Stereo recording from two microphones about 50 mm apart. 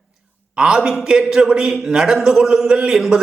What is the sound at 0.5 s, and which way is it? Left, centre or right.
A man's voice, centre.